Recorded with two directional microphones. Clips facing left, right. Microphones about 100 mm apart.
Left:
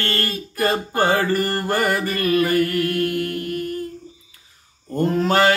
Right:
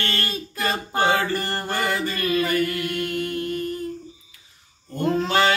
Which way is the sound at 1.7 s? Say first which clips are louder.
Left 2 dB; 40° left (ahead or behind).